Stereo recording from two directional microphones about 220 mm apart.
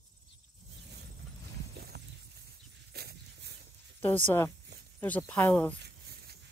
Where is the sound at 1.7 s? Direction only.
45° right (ahead or behind).